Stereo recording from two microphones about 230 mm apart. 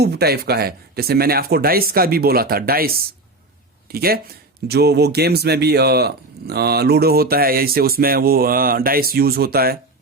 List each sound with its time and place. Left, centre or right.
0.0 s speech: right